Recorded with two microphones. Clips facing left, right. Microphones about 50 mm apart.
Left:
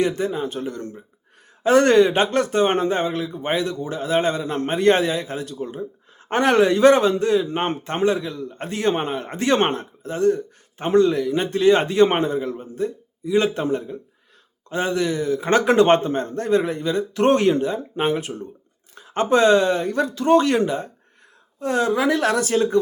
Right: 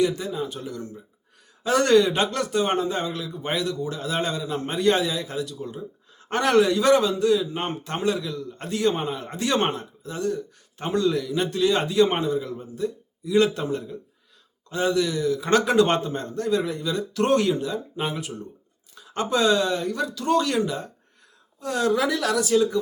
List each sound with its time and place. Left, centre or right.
0.0 s a man's voice: left